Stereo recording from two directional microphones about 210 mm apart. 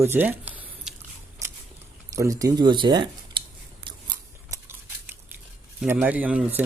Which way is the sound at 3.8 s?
20° right (ahead or behind).